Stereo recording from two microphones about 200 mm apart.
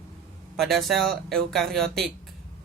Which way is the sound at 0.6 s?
Centre (ahead or behind).